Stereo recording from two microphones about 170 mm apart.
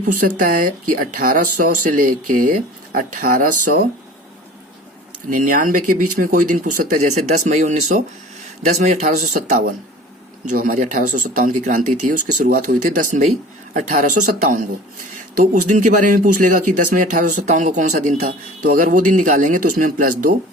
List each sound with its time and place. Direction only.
0.0 s speech: 50° right (ahead or behind)
5.3 s speech: 50° right (ahead or behind)